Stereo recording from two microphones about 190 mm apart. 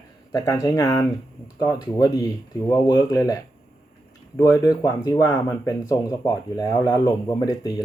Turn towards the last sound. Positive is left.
turn(degrees=20)  # may be behind; listen again after turning